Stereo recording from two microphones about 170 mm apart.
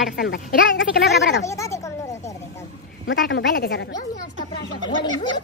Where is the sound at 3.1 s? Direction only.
90° left; by 3.9 s 70° left (ahead or behind).